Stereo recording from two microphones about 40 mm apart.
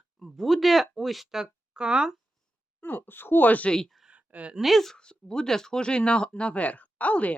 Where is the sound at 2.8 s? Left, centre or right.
Left.